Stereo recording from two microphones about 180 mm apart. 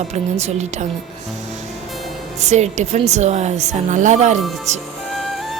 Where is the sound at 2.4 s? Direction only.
40° right (ahead or behind).